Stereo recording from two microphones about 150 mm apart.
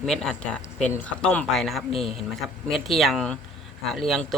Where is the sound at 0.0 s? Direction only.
5° left (ahead or behind).